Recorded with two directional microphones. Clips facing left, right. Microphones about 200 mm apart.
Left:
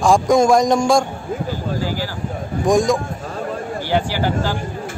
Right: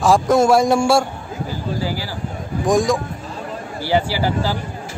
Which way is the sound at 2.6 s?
Centre (ahead or behind).